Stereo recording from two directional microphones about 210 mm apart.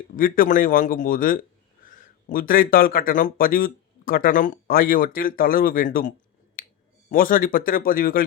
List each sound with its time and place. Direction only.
0.2 s a man's voice: 40° left (ahead or behind)
6.6 s finger snapping: 40° left (ahead or behind)
7.1 s a man's voice: 40° left (ahead or behind)